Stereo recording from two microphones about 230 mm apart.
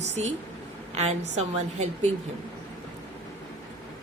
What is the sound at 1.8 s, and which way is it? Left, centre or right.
Speech, right.